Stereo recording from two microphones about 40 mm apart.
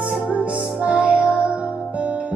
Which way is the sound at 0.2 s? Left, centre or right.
Right.